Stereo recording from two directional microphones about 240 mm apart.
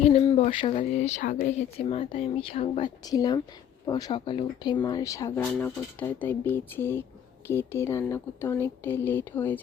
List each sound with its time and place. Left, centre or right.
0.0 s speech: left; by 9.6 s centre